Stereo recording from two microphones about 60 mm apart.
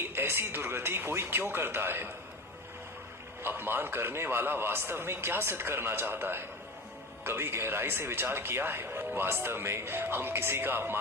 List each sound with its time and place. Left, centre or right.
0.0 s speech: right
3.4 s speech: right